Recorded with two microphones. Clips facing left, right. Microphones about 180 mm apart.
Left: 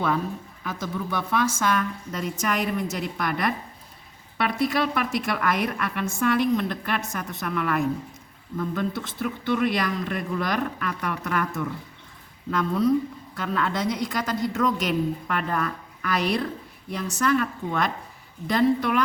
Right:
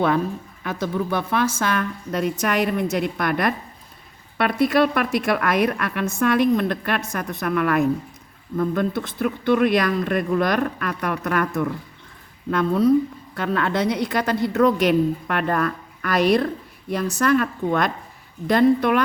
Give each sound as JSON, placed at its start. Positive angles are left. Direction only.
{"t": 0.6, "sound": "speech", "side_deg": -65}
{"t": 13.3, "sound": "speech", "side_deg": -55}